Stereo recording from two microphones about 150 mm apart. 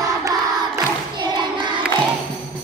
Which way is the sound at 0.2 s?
25° right (ahead or behind).